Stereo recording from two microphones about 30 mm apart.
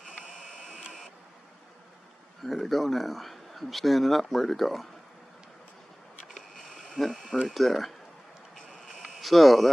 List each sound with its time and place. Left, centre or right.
0.1 s printer: right
2.4 s speech: centre
6.5 s a sound: centre
6.9 s a sound: centre
7.6 s speech: centre
9.2 s speech: centre